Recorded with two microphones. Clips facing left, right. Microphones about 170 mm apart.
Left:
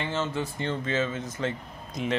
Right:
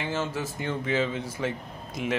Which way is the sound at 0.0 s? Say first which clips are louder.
Even; 10° right (ahead or behind).